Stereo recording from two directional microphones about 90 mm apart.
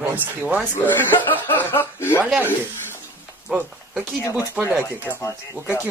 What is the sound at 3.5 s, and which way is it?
Speech, 10° right (ahead or behind).